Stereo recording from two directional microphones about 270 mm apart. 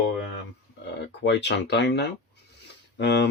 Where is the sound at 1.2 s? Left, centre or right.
Left.